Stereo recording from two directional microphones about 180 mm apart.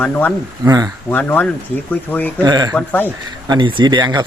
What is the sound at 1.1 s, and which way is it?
Speech, 10° left (ahead or behind).